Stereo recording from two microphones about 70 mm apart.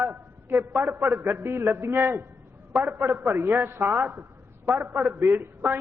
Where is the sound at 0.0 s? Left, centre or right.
Right.